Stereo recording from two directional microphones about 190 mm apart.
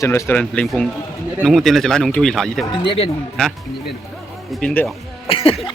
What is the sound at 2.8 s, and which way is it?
Speech, 25° left (ahead or behind).